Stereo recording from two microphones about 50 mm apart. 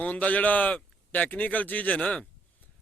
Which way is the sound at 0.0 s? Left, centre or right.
Left.